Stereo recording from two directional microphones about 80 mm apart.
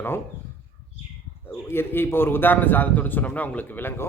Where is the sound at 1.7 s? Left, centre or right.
Left.